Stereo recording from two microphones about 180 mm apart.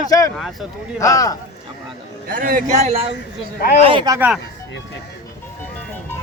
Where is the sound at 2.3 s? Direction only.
50° right (ahead or behind).